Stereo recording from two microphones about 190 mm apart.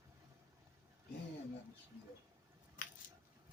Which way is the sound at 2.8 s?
45° left (ahead or behind).